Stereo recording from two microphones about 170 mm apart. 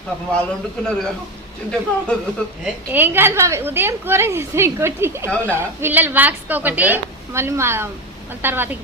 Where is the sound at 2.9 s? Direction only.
10° right (ahead or behind).